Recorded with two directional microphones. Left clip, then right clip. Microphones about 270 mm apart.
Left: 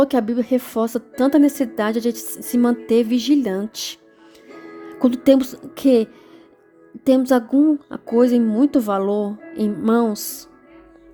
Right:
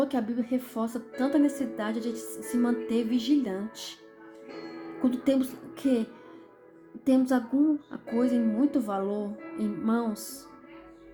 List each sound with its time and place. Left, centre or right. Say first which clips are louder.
0.0 s a woman's voice: left 11 dB; left
4.9 s a woman's voice: left 11 dB; left